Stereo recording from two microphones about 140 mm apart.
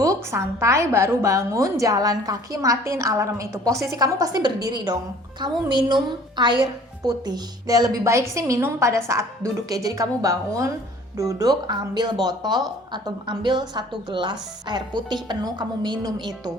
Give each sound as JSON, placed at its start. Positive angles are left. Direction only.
{"t": 0.0, "sound": "a woman's voice", "side_deg": -20}